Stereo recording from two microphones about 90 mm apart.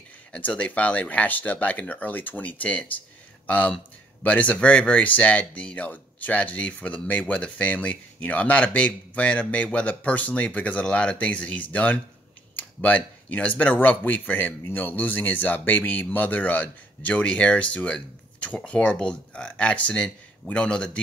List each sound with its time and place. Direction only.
0.3 s speech: 15° left (ahead or behind)